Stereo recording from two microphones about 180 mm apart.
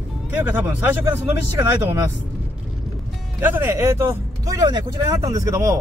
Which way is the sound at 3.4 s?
10° right (ahead or behind).